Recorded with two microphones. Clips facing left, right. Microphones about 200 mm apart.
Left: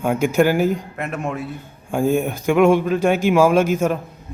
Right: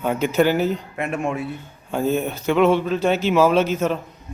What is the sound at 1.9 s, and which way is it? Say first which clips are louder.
Speech: left 3 dB; 10° left (ahead or behind).